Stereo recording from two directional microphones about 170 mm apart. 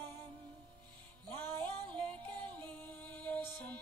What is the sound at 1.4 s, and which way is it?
Music, 10° left (ahead or behind).